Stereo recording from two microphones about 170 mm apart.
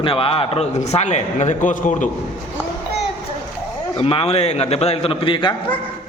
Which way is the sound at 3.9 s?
35° left (ahead or behind).